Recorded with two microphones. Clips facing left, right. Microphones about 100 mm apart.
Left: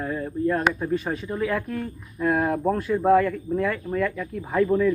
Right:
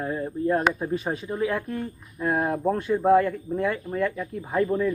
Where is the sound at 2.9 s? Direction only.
15° right (ahead or behind).